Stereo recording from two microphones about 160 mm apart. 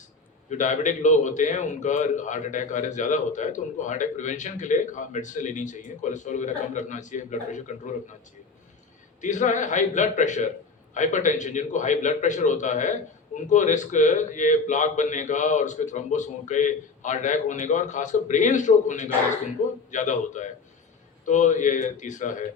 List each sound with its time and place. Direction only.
0.5 s a man's voice: 50° left (ahead or behind)
9.2 s a man's voice: 50° left (ahead or behind)